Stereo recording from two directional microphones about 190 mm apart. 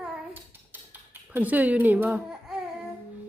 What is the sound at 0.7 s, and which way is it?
Baby cry, 10° right (ahead or behind).